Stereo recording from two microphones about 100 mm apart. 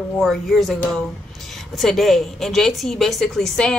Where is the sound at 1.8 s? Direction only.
Centre (ahead or behind).